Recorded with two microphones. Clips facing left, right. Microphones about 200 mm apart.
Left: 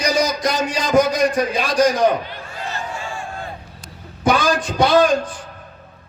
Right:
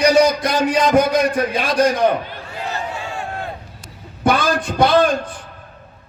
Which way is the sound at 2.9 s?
65° right (ahead or behind).